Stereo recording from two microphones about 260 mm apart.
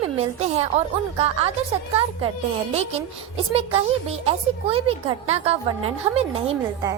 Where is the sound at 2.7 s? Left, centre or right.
Right.